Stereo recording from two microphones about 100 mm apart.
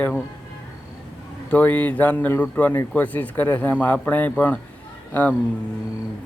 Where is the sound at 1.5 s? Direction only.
15° left (ahead or behind).